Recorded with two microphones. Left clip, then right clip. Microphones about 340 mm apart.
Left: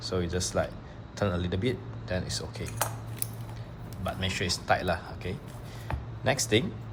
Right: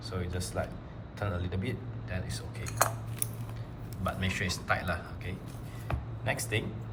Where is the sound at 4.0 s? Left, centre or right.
Centre.